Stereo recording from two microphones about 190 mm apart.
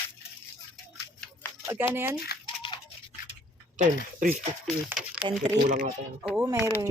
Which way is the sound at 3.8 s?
45° right (ahead or behind).